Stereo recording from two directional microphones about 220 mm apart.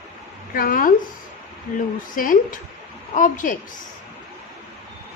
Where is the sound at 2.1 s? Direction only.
40° left (ahead or behind).